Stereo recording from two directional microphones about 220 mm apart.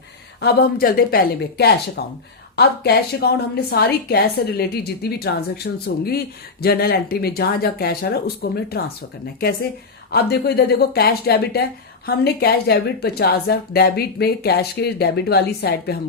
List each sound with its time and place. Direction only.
0.4 s a woman's voice: 45° left (ahead or behind)
10.1 s a woman's voice: 45° left (ahead or behind)